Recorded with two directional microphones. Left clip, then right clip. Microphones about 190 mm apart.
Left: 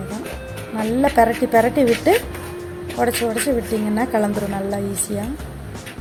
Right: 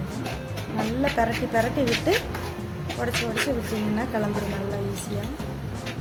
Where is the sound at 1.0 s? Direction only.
35° left (ahead or behind).